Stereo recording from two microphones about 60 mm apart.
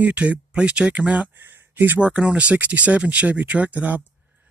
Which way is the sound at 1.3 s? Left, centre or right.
Right.